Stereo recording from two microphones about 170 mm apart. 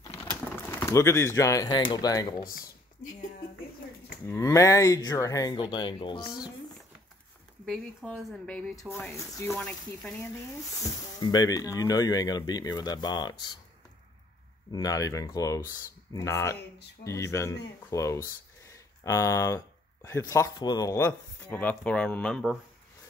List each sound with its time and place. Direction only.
0.3 s a sound: 15° left (ahead or behind)
1.9 s speech: 20° left (ahead or behind)
4.3 s speech: 20° left (ahead or behind)
7.6 s speech: centre (ahead or behind)
8.7 s speech: 15° left (ahead or behind)
9.6 s speech: centre (ahead or behind)
10.8 s speech: 25° left (ahead or behind)
14.7 s speech: 20° left (ahead or behind); by 22.6 s centre (ahead or behind)